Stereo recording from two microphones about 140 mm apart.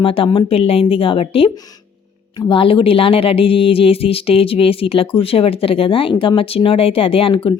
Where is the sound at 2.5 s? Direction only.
40° left (ahead or behind).